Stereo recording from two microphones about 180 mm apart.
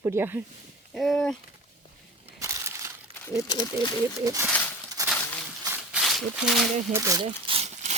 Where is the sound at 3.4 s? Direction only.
20° left (ahead or behind).